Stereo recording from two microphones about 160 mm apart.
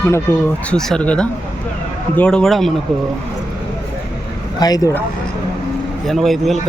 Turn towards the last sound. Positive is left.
turn(degrees=0)  # may be behind; listen again after turning